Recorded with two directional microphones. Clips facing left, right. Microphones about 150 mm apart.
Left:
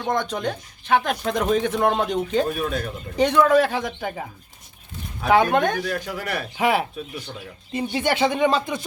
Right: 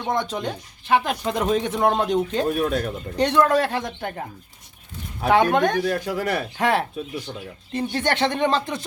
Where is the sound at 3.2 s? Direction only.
Centre (ahead or behind).